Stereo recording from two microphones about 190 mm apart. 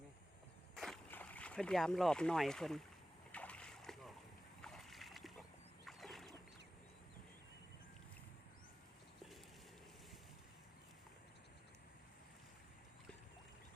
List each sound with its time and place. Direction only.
0.8 s speech: 5° left (ahead or behind)
3.3 s splash: 5° left (ahead or behind)
5.8 s a sound: centre (ahead or behind)